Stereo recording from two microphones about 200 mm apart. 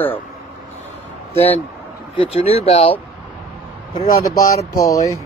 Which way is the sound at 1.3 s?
10° left (ahead or behind).